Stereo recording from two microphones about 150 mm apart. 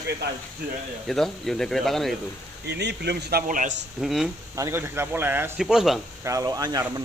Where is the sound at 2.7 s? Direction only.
90° right; by 3.7 s 65° right (ahead or behind).